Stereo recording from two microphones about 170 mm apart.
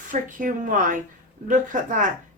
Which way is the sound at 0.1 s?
50° right (ahead or behind).